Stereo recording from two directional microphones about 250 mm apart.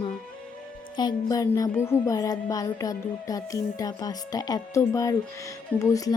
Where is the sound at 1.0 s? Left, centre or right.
Centre.